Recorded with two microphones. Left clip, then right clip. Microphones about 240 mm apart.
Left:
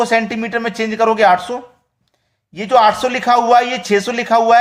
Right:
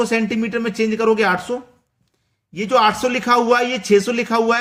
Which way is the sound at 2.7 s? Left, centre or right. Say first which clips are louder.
Left 4 dB; centre.